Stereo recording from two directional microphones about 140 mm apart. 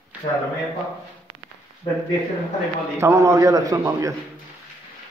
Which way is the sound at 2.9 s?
20° right (ahead or behind).